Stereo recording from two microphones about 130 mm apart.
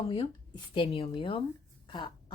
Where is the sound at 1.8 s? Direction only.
35° left (ahead or behind).